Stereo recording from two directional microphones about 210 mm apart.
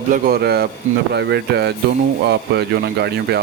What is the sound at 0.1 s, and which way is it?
Speech, 45° right (ahead or behind).